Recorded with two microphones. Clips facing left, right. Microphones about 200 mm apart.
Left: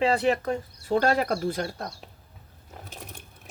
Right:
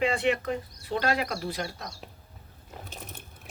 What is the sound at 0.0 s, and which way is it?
Speech, 35° left (ahead or behind).